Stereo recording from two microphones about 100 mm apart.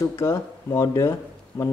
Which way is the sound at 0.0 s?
25° left (ahead or behind).